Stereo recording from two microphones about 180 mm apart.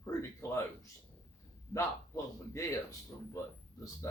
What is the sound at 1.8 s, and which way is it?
Speech, 20° left (ahead or behind).